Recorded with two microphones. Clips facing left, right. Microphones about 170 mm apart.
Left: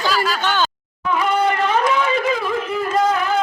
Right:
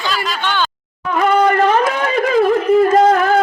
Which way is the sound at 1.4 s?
50° right (ahead or behind).